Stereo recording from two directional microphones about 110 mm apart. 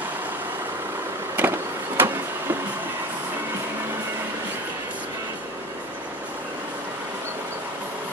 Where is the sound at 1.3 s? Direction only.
20° right (ahead or behind).